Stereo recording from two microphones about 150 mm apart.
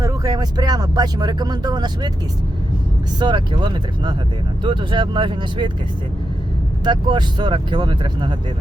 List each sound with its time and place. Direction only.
0.0 s speech: 25° right (ahead or behind)
3.2 s speech: 30° right (ahead or behind)
6.8 s speech: 30° right (ahead or behind)